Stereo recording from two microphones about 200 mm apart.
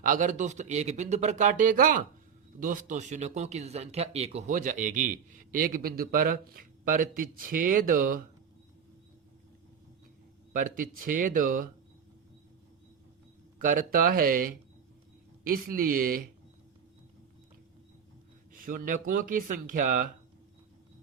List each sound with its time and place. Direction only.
0.0 s speech: 40° right (ahead or behind)
10.5 s speech: 40° right (ahead or behind)
13.6 s speech: 45° right (ahead or behind)
18.5 s speech: 45° right (ahead or behind)